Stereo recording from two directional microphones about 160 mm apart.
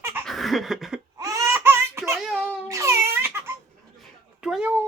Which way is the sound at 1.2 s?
20° right (ahead or behind).